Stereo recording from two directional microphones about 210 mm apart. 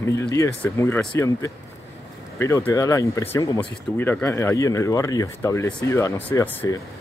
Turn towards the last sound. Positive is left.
turn(degrees=10)  # may be behind; listen again after turning